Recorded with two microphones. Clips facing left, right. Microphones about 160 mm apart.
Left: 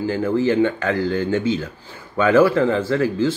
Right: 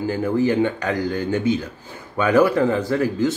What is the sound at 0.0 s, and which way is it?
Speech, 15° right (ahead or behind).